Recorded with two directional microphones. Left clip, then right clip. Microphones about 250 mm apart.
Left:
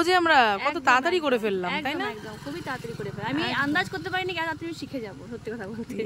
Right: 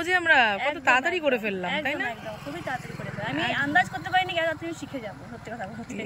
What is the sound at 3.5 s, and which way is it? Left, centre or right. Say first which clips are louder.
Speech: right 4 dB; centre.